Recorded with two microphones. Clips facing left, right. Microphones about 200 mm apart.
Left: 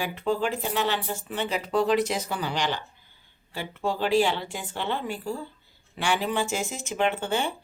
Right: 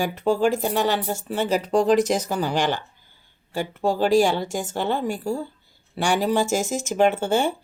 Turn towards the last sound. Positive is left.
turn(degrees=-45)  # may be behind; listen again after turning